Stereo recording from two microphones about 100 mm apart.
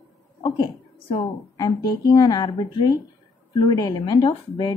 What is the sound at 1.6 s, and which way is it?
Speech, 40° left (ahead or behind).